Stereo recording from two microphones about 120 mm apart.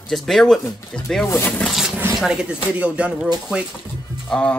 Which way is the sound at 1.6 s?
5° right (ahead or behind).